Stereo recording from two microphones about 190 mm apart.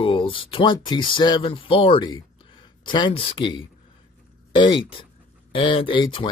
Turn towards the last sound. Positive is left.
turn(degrees=25)  # may be behind; listen again after turning